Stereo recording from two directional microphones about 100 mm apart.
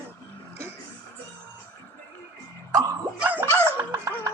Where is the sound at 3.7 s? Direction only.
30° right (ahead or behind).